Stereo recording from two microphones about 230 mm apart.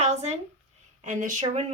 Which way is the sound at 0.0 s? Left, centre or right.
Right.